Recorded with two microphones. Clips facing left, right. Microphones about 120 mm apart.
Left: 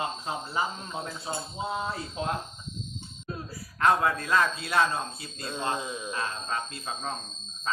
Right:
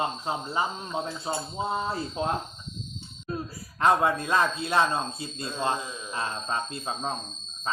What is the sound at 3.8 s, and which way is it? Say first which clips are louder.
Speech: right 2 dB; 20° right (ahead or behind).